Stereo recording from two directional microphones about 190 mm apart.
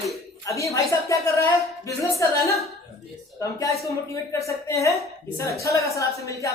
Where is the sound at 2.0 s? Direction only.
15° left (ahead or behind).